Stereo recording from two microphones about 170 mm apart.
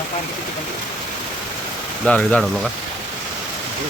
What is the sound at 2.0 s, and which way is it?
Speech, 5° left (ahead or behind).